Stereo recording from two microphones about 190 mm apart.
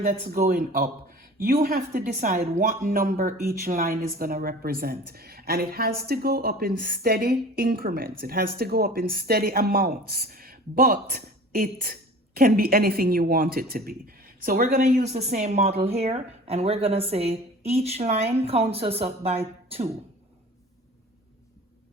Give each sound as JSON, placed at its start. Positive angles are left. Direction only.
{"t": 0.1, "sound": "a woman's voice", "side_deg": -50}